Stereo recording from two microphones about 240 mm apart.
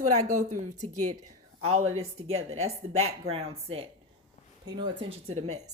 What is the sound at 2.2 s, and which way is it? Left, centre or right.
Speech, right.